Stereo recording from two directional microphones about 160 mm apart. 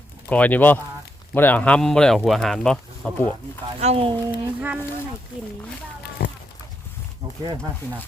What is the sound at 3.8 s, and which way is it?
Speech, 40° right (ahead or behind).